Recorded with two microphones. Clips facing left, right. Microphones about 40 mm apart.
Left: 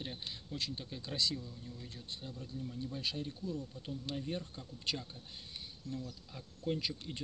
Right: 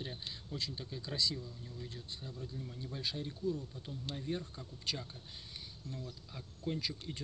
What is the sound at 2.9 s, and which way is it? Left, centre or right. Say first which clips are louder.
Speech: right 1 dB; right.